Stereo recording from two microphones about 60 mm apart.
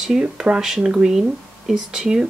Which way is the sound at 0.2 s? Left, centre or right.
Centre.